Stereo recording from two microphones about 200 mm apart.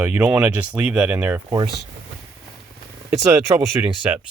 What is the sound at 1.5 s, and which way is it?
Speech, 25° right (ahead or behind).